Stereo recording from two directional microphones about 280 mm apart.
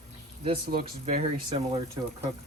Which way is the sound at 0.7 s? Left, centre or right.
Right.